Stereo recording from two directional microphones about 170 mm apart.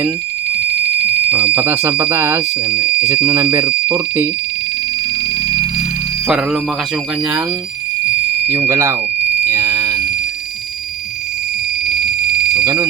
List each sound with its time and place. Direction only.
1.5 s speech: 15° right (ahead or behind)
6.2 s speech: 5° right (ahead or behind)
8.4 s speech: 15° right (ahead or behind)
9.5 s a sound: 20° right (ahead or behind)
12.3 s a sound: centre (ahead or behind)
12.6 s speech: 20° right (ahead or behind)